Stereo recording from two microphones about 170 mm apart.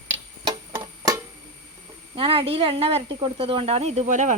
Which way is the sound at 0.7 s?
20° right (ahead or behind).